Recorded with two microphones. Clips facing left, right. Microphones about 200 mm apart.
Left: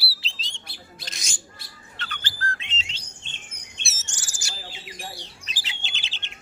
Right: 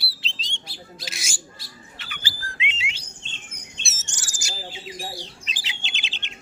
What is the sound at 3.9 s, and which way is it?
Bird, 20° right (ahead or behind).